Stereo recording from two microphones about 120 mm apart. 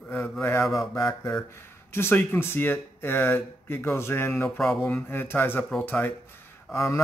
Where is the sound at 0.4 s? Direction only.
20° left (ahead or behind).